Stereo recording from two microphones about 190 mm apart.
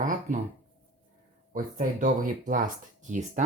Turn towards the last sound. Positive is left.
turn(degrees=-40)  # may be behind; listen again after turning